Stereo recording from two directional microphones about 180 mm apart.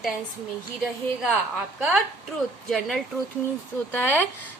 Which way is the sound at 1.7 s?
5° right (ahead or behind).